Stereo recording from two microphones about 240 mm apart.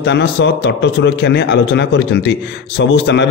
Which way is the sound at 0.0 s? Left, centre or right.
Left.